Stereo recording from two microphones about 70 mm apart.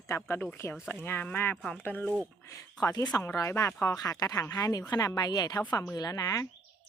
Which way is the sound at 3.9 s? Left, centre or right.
Left.